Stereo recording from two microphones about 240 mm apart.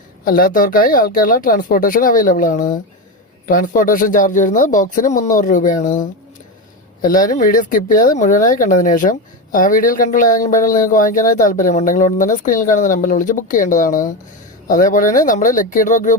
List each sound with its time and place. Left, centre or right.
0.3 s speech: left